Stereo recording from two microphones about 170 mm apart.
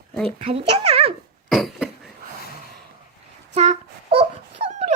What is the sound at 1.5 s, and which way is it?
Cough, centre (ahead or behind).